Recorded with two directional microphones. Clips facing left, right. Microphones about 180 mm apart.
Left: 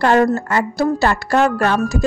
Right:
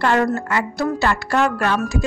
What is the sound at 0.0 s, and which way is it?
Speech, 40° left (ahead or behind).